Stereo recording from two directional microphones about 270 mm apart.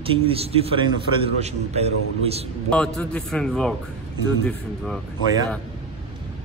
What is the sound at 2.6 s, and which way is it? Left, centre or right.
Speech, centre.